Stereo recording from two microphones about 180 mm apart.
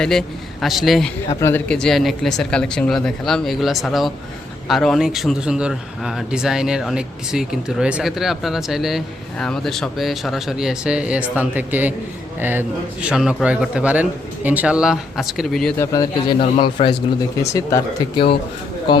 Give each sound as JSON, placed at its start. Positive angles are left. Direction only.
{"t": 0.0, "sound": "a man's voice", "side_deg": 5}
{"t": 1.4, "sound": "a man's voice", "side_deg": 10}
{"t": 15.8, "sound": "a man's voice", "side_deg": 20}
{"t": 17.5, "sound": "speech", "side_deg": 15}
{"t": 18.9, "sound": "a man's voice", "side_deg": 25}